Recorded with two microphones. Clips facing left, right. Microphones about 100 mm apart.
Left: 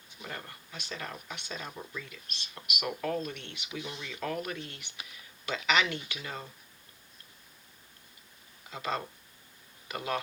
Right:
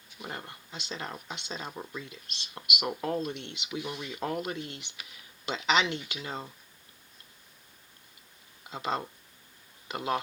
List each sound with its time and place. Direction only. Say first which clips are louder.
0.2 s speech: right 2 dB; 25° right (ahead or behind)
8.7 s speech: right 2 dB; 25° right (ahead or behind)